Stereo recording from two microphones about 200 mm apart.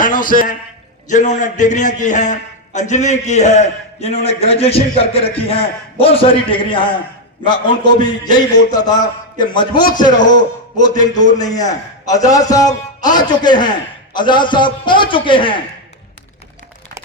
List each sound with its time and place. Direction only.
0.0 s a man's voice: 40° left (ahead or behind); by 15.6 s 25° left (ahead or behind)